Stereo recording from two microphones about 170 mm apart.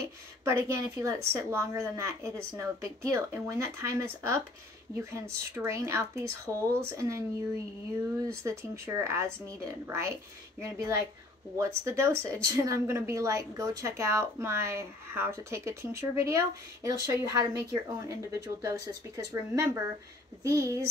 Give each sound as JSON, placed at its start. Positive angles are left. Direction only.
{"t": 0.0, "sound": "a woman's voice", "side_deg": -15}